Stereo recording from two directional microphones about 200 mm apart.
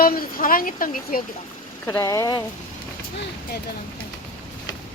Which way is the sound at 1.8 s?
15° left (ahead or behind).